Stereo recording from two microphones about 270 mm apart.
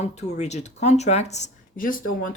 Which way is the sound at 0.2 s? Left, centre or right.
Left.